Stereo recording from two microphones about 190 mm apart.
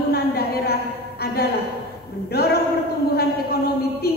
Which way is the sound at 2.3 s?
55° left (ahead or behind).